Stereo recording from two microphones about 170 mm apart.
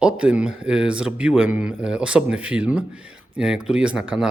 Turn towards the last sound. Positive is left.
turn(degrees=-5)  # may be behind; listen again after turning